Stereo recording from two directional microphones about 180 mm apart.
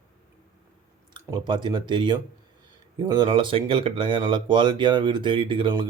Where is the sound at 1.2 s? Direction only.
20° right (ahead or behind).